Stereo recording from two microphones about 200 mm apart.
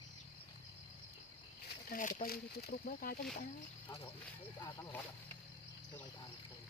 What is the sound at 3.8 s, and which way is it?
Speech, 25° left (ahead or behind).